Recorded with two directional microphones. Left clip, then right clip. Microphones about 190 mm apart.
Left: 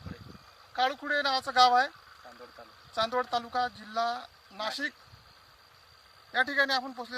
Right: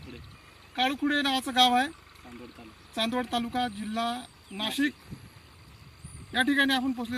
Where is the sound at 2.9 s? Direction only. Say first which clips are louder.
Left 1 dB; 10° right (ahead or behind).